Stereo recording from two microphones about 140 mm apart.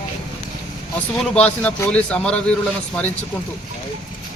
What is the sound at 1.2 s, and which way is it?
Speech, 10° left (ahead or behind).